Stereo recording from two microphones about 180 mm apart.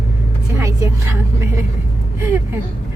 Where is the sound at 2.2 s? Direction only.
15° right (ahead or behind).